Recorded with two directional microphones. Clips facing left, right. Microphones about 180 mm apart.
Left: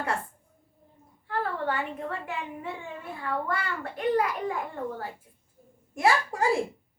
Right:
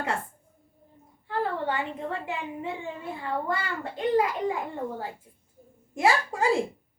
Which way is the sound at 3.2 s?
25° right (ahead or behind).